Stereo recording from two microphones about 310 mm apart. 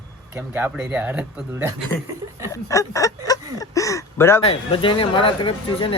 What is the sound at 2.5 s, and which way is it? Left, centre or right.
Speech, centre.